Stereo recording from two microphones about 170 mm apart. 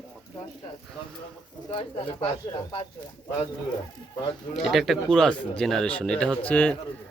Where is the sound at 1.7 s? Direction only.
30° left (ahead or behind).